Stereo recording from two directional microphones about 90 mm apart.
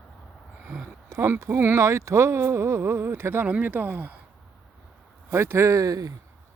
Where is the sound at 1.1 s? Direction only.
30° right (ahead or behind).